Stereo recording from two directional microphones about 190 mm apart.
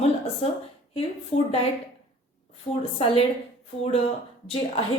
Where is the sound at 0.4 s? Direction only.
35° left (ahead or behind).